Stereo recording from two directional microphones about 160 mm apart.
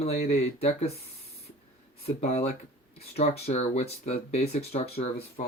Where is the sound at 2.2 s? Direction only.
40° left (ahead or behind).